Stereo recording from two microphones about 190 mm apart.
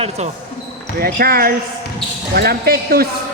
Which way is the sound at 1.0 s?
50° right (ahead or behind).